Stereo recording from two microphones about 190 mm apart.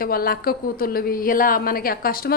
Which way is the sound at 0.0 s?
50° left (ahead or behind).